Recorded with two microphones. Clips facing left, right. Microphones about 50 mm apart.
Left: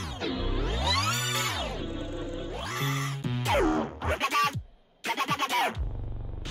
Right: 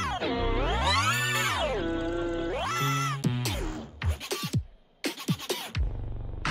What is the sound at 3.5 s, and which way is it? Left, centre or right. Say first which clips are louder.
Music: left 11 dB; left.